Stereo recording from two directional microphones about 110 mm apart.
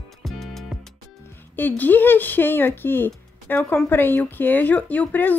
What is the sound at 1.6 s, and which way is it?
A woman's voice, 15° left (ahead or behind).